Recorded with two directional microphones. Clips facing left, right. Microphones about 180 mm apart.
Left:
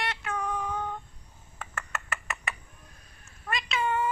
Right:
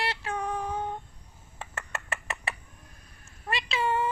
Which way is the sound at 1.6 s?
25° right (ahead or behind).